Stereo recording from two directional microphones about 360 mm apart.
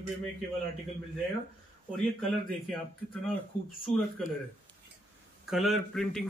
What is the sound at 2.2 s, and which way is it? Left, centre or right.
Speech, centre.